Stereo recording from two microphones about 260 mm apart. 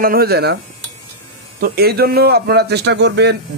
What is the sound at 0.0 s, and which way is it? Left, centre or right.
Speech, right.